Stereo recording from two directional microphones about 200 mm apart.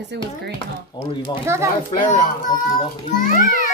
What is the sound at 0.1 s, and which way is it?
Speech, 60° right (ahead or behind).